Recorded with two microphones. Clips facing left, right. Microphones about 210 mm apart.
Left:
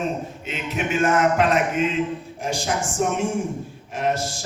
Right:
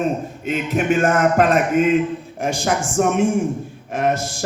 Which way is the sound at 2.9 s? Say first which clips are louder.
Right 7 dB; 55° right (ahead or behind).